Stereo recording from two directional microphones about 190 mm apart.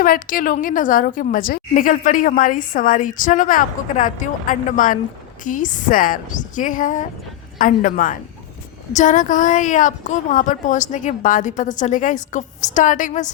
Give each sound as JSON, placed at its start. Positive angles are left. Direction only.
{"t": 0.0, "sound": "a woman's voice", "side_deg": 45}